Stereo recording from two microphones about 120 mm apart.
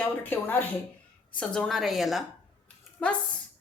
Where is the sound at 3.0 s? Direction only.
10° left (ahead or behind).